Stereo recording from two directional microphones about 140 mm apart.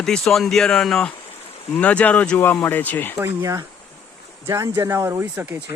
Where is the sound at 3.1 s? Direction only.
20° right (ahead or behind).